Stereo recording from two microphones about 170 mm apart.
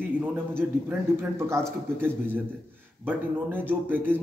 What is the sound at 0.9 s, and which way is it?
Speech, 15° right (ahead or behind).